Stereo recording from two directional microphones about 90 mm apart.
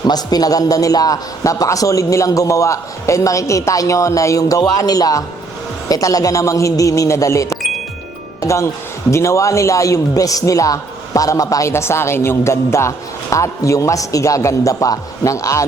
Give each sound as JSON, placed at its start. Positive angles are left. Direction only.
{"t": 0.0, "sound": "a man's voice", "side_deg": 45}
{"t": 11.7, "sound": "a woman's voice", "side_deg": 30}